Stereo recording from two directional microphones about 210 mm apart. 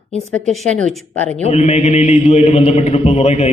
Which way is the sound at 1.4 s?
30° left (ahead or behind).